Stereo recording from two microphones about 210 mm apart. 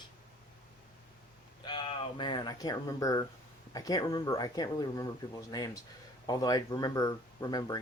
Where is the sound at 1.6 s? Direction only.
25° left (ahead or behind).